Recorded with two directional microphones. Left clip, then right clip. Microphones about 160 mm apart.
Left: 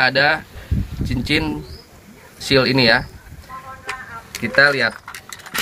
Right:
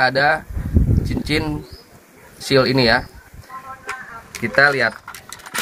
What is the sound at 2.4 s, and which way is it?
Speech, 10° right (ahead or behind).